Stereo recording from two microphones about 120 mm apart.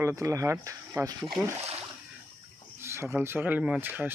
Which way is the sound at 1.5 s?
60° right (ahead or behind).